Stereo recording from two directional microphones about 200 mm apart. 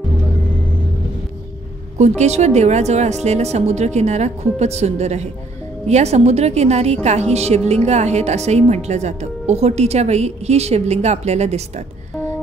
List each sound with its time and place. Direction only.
2.0 s a woman's voice: 35° right (ahead or behind)